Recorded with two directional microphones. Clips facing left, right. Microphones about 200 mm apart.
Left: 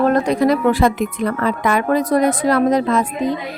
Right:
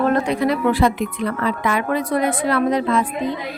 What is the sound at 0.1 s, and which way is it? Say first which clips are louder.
Speech: left 3 dB; 40° left (ahead or behind).